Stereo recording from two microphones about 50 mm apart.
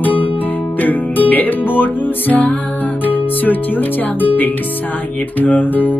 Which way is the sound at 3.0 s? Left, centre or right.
Left.